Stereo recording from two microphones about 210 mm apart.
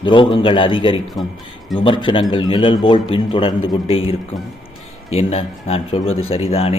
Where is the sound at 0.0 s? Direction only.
25° left (ahead or behind).